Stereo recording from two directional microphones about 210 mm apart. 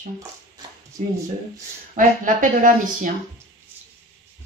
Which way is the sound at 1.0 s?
35° right (ahead or behind).